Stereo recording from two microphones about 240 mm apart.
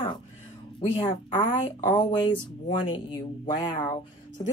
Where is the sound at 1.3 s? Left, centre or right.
Left.